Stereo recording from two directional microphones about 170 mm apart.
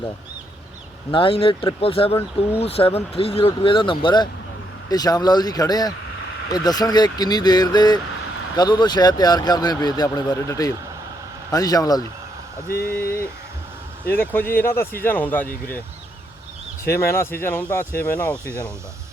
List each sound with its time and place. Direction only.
1.1 s speech: 30° left (ahead or behind)
12.6 s speech: 65° left (ahead or behind)
14.0 s speech: 10° left (ahead or behind)
16.8 s speech: 15° left (ahead or behind)